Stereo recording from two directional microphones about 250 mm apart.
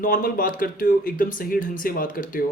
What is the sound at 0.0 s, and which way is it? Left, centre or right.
Speech, left.